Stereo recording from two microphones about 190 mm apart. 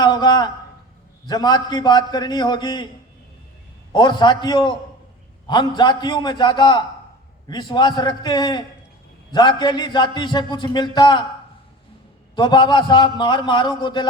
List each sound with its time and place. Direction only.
0.0 s a sound: 25° left (ahead or behind)
1.3 s a man's voice: 20° left (ahead or behind)
3.9 s a man's voice: 25° left (ahead or behind)
12.4 s a man's voice: 25° left (ahead or behind)